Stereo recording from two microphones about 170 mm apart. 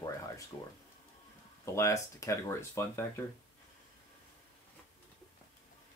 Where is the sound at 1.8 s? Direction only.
15° left (ahead or behind).